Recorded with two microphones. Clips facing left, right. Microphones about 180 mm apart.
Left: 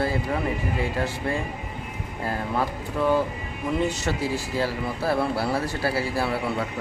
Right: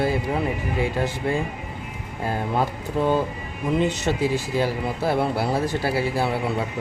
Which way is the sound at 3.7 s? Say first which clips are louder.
Right 3 dB; 20° right (ahead or behind).